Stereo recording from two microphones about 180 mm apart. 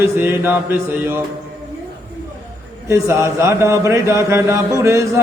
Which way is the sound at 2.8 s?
15° right (ahead or behind).